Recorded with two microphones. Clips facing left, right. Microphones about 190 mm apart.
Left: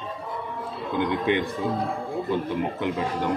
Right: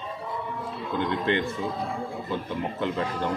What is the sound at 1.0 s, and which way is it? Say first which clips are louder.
Speech: left 2 dB; 15° left (ahead or behind).